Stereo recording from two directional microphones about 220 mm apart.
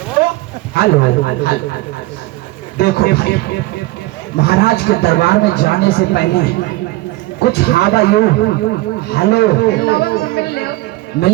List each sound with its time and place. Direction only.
0.7 s a man's voice: 45° left (ahead or behind)
2.7 s a man's voice: 45° left (ahead or behind)